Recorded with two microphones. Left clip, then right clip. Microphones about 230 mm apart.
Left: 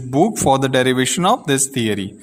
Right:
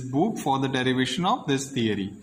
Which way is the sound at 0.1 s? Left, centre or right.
Left.